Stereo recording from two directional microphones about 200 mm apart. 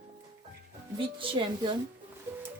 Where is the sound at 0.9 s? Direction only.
25° right (ahead or behind).